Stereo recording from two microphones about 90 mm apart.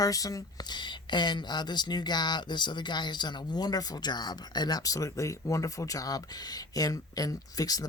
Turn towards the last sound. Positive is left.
turn(degrees=45)  # may be behind; listen again after turning